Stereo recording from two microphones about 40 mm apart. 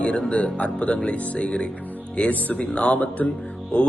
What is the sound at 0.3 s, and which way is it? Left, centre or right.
A man's voice, left.